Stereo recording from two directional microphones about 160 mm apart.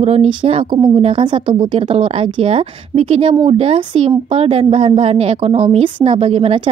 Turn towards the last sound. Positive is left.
turn(degrees=-35)  # may be behind; listen again after turning